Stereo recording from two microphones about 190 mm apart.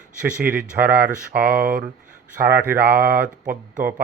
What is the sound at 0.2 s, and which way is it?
Speech, 5° right (ahead or behind).